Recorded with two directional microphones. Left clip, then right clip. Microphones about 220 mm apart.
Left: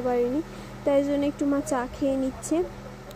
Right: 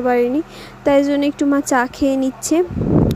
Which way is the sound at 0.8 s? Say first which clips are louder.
Right 8 dB; 40° right (ahead or behind).